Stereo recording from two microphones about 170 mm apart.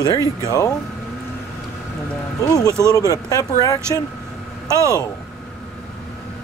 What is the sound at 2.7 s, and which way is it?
Speech, 15° right (ahead or behind).